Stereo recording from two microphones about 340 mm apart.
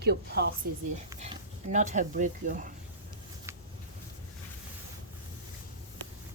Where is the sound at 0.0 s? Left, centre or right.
Right.